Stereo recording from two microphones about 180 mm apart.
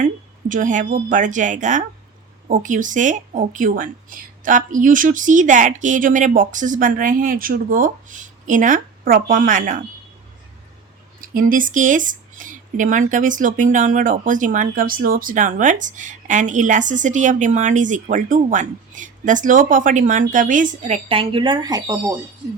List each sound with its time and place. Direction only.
0.0 s speech: 45° right (ahead or behind)
11.2 s speech: 50° right (ahead or behind); by 22.1 s 20° right (ahead or behind)